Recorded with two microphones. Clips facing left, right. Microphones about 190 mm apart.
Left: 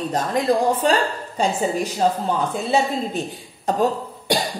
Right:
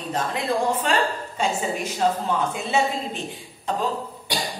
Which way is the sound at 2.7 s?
35° left (ahead or behind).